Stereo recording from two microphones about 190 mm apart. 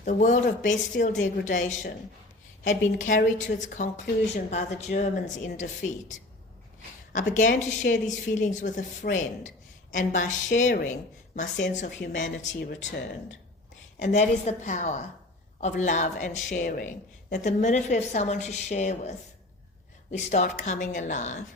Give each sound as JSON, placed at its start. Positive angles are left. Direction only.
{"t": 0.0, "sound": "a woman's voice", "side_deg": 40}
{"t": 11.9, "sound": "speech", "side_deg": 75}
{"t": 14.0, "sound": "a woman's voice", "side_deg": 40}